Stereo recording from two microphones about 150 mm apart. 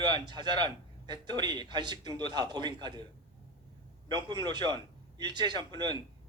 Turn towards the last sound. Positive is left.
turn(degrees=-30)  # may be behind; listen again after turning